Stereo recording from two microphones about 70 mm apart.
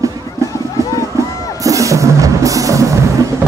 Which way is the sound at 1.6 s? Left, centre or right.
Right.